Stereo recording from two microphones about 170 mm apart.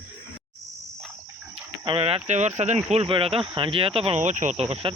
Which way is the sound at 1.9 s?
35° right (ahead or behind).